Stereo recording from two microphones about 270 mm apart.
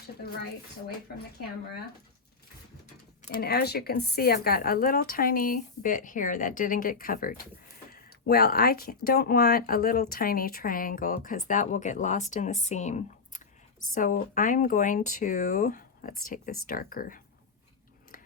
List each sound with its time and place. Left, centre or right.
3.2 s speech: left